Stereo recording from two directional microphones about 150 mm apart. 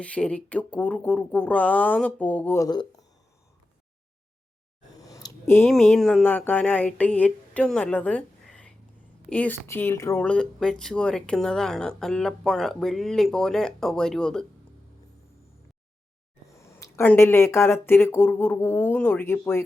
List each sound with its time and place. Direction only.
0.0 s speech: 10° left (ahead or behind)
2.6 s speech: 25° left (ahead or behind)
4.9 s a sound: 25° left (ahead or behind)
5.6 s speech: 5° left (ahead or behind)
10.2 s speech: 5° left (ahead or behind)
16.8 s speech: 15° left (ahead or behind)